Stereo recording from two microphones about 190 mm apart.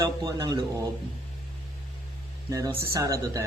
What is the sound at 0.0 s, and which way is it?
Speech, 20° right (ahead or behind).